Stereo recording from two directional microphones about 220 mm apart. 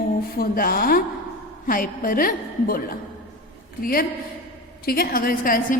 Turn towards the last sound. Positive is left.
turn(degrees=40)  # may be behind; listen again after turning